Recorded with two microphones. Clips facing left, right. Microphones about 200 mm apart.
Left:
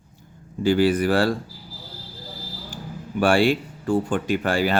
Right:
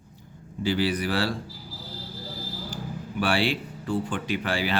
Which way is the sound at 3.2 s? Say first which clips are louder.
Left 7 dB; 45° left (ahead or behind).